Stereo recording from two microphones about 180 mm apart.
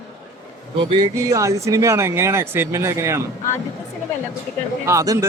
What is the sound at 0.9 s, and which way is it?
Speech, 20° right (ahead or behind).